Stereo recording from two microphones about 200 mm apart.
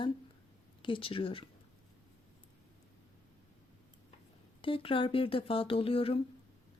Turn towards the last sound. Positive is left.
turn(degrees=30)  # may be behind; listen again after turning